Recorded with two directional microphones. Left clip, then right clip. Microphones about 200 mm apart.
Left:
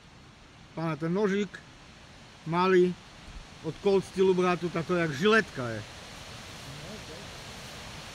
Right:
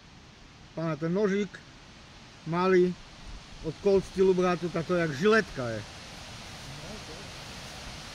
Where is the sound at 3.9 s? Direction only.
15° left (ahead or behind).